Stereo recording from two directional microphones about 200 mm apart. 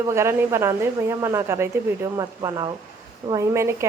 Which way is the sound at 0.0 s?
15° right (ahead or behind).